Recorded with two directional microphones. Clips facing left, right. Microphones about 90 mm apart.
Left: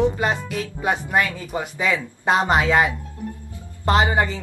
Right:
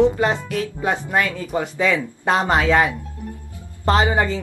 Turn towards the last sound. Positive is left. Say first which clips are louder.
# right 1 dB
turn(degrees=20)  # may be behind; listen again after turning